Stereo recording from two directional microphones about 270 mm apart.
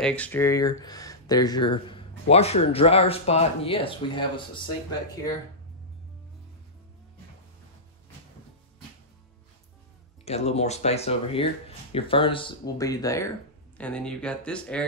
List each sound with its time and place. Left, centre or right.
0.0 s speech: centre
10.2 s speech: left; by 14.9 s centre